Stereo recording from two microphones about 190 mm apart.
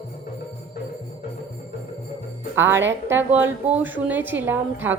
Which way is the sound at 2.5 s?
10° right (ahead or behind).